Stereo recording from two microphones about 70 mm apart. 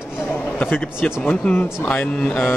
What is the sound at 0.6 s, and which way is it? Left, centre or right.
Speech, left.